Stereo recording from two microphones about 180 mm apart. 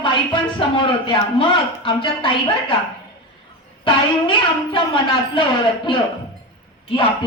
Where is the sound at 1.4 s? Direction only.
30° left (ahead or behind).